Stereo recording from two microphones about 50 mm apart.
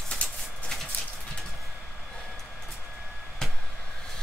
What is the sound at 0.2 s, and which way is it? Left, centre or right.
Clip-clop, left.